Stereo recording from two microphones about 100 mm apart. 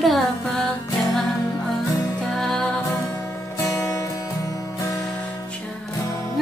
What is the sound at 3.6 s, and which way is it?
Music, 30° left (ahead or behind).